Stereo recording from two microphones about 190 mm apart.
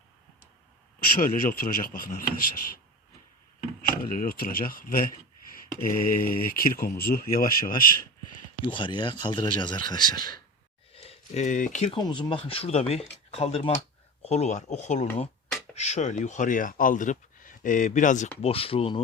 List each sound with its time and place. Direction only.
0.9 s speech: 50° left (ahead or behind)
4.0 s speech: 50° left (ahead or behind)
8.6 s speech: 25° left (ahead or behind)
10.9 s a sound: 30° left (ahead or behind)
11.9 s speech: 25° left (ahead or behind); by 18.3 s 40° left (ahead or behind)
18.4 s speech: 30° left (ahead or behind)